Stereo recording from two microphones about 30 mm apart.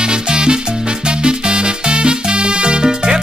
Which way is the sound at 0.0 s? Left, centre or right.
Right.